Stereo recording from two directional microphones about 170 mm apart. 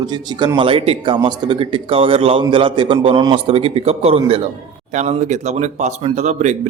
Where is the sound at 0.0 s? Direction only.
25° right (ahead or behind).